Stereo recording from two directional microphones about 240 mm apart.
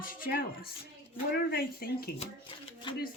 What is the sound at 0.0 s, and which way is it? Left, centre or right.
Speech, left.